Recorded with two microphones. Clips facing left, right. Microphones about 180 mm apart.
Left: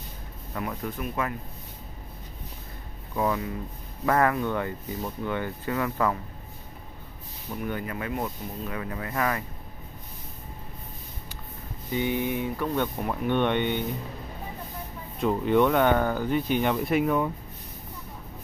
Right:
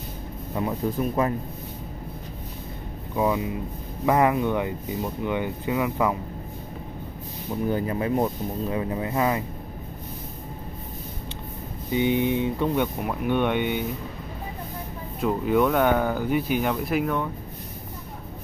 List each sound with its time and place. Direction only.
0.6 s speech: 30° right (ahead or behind)
3.2 s speech: 15° right (ahead or behind)
7.6 s speech: 30° right (ahead or behind)
11.9 s speech: 20° right (ahead or behind)
15.1 s speech: 5° right (ahead or behind)